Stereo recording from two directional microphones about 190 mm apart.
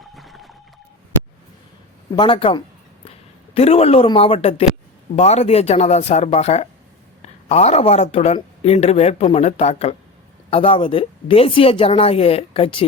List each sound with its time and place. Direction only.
0.2 s music: centre (ahead or behind)
2.1 s a sound: 25° left (ahead or behind)
3.5 s a man's voice: 35° left (ahead or behind)